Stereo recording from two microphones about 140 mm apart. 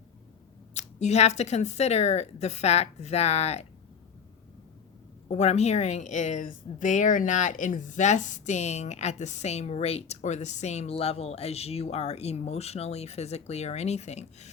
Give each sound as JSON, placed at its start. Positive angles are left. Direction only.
{"t": 0.7, "sound": "speech", "side_deg": 55}
{"t": 5.3, "sound": "speech", "side_deg": 50}